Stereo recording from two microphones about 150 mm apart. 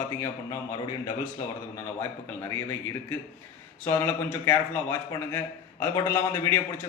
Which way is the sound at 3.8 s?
15° left (ahead or behind).